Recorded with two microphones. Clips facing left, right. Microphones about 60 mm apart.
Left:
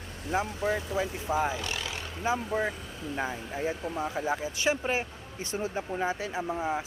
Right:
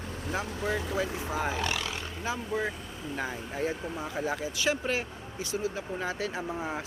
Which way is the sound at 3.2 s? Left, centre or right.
Centre.